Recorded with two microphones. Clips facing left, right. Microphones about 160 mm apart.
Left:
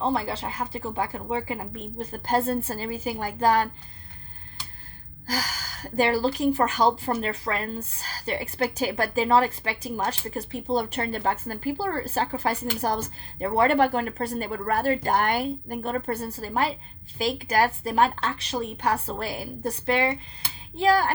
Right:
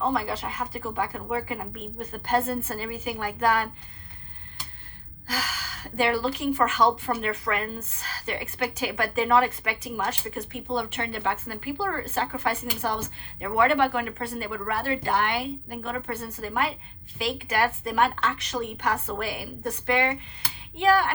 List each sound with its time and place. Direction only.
0.0 s a woman's voice: 30° left (ahead or behind)
5.3 s a woman's voice: 35° left (ahead or behind)